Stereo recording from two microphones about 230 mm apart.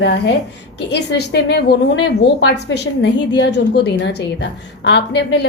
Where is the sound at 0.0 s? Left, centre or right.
Left.